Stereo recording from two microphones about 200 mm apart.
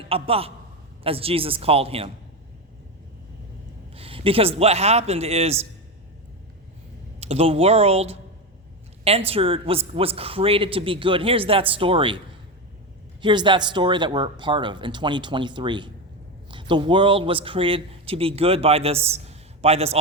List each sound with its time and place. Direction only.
0.0 s a man's voice: 30° right (ahead or behind)
3.9 s a man's voice: 25° right (ahead or behind)
7.2 s speech: 30° right (ahead or behind)
13.2 s a man's voice: 25° right (ahead or behind)